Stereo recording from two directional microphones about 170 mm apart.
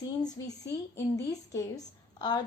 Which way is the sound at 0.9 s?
20° left (ahead or behind).